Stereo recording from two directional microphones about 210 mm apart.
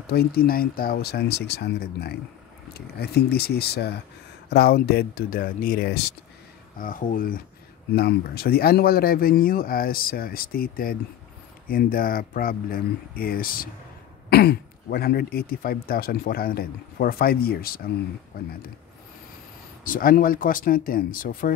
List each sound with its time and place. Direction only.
0.1 s speech: 45° left (ahead or behind)
6.8 s speech: 40° left (ahead or behind)
19.8 s speech: 40° left (ahead or behind)